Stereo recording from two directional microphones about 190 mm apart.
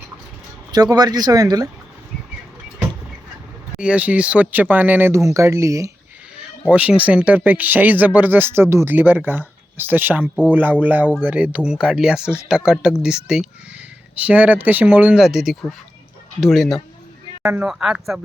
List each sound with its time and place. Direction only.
0.7 s speech: 20° right (ahead or behind)
3.8 s speech: 5° right (ahead or behind)
6.3 s speech: 5° right (ahead or behind)
17.4 s speech: 10° right (ahead or behind)